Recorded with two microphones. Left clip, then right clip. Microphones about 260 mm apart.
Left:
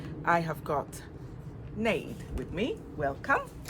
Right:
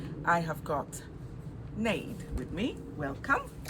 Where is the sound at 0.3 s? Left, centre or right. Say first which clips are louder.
Left 1 dB; centre.